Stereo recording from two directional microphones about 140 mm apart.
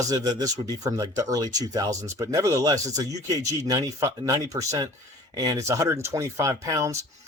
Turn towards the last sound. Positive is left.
turn(degrees=-25)  # may be behind; listen again after turning